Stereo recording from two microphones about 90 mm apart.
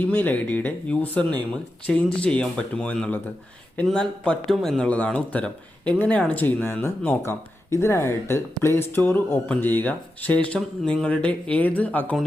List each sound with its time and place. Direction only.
0.0 s a man's voice: 20° left (ahead or behind); by 4.8 s centre (ahead or behind)
4.8 s speech: 15° left (ahead or behind)